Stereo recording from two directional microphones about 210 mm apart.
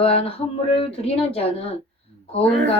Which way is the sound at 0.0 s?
25° left (ahead or behind).